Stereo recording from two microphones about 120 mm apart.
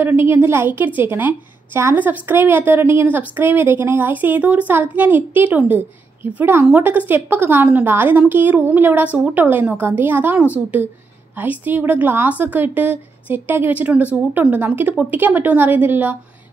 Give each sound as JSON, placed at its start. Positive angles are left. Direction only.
{"t": 0.0, "sound": "a woman's voice", "side_deg": -15}